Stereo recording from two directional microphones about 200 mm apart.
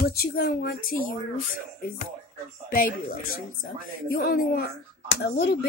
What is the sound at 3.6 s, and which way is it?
Speech, 45° left (ahead or behind).